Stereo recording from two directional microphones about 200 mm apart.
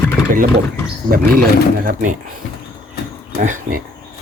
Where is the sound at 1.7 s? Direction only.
45° right (ahead or behind).